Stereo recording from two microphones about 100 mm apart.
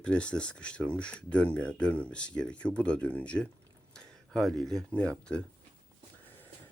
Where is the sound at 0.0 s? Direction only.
10° left (ahead or behind).